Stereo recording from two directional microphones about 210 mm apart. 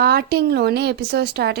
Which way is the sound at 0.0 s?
45° right (ahead or behind).